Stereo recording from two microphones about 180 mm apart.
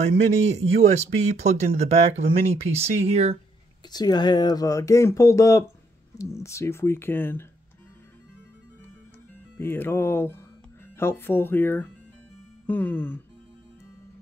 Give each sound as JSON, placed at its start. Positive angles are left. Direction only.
{"t": 0.6, "sound": "speech", "side_deg": -40}
{"t": 3.9, "sound": "speech", "side_deg": 25}
{"t": 9.6, "sound": "speech", "side_deg": 10}